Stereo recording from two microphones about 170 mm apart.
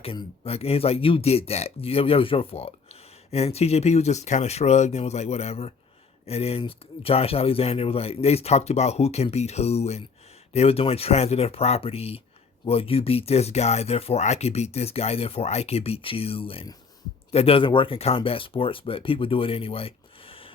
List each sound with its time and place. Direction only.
0.0 s speech: 35° left (ahead or behind)